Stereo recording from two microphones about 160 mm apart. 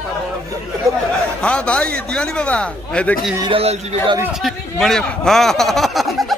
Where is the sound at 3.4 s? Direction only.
30° right (ahead or behind).